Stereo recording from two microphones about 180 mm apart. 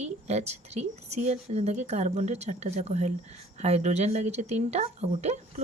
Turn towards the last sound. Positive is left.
turn(degrees=-40)  # may be behind; listen again after turning